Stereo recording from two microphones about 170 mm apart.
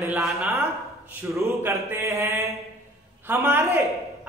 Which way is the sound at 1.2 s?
15° right (ahead or behind).